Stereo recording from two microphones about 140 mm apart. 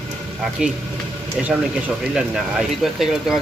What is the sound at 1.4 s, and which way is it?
Speech, 10° right (ahead or behind).